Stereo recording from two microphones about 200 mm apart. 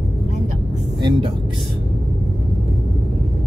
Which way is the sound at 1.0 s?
20° right (ahead or behind).